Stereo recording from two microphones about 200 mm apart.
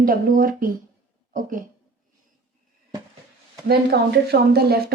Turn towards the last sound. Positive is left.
turn(degrees=-50)  # may be behind; listen again after turning